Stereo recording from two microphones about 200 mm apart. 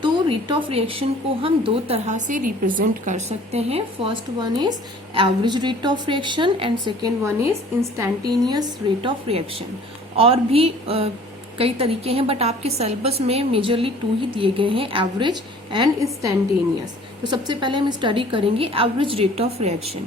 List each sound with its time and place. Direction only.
0.0 s speech: 25° right (ahead or behind)
9.0 s speech: 30° right (ahead or behind)
17.2 s speech: 20° right (ahead or behind)